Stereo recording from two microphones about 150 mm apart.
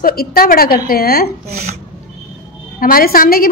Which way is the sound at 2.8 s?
75° left (ahead or behind).